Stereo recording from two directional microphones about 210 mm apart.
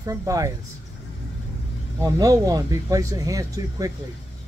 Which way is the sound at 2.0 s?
15° right (ahead or behind).